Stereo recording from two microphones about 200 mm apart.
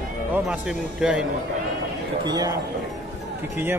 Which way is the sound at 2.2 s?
20° right (ahead or behind).